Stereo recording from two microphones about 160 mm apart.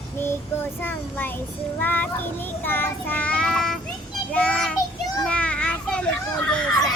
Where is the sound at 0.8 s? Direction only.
10° left (ahead or behind).